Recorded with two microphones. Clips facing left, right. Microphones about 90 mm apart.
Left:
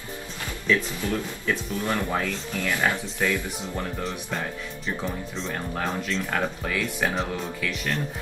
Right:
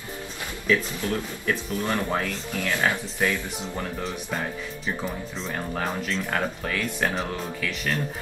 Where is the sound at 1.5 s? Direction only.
15° right (ahead or behind).